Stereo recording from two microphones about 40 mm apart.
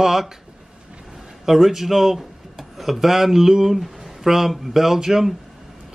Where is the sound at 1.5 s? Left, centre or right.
Centre.